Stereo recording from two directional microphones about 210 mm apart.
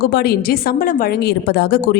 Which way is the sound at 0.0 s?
50° left (ahead or behind).